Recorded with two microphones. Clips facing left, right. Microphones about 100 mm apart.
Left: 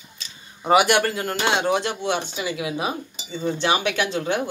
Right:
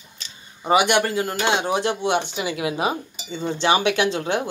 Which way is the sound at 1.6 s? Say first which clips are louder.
Right 1 dB; 20° right (ahead or behind).